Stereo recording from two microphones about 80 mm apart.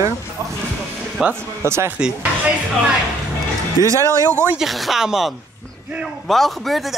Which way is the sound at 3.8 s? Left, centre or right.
Right.